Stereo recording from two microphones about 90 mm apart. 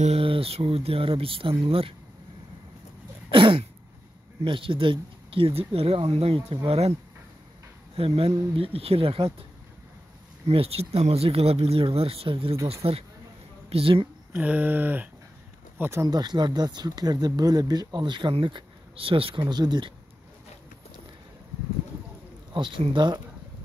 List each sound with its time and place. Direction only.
0.1 s speech: 90° right
3.3 s throat clearing: 65° right (ahead or behind)
4.5 s speech: 75° right (ahead or behind)
7.9 s speech: 90° right
10.5 s speech: 90° right
14.3 s a sound: 15° right (ahead or behind)
15.8 s speech: 30° right (ahead or behind)
16.1 s speech: 50° right (ahead or behind); by 19.4 s 85° right
19.5 s speech: 55° right (ahead or behind)
22.5 s speech: 65° right (ahead or behind)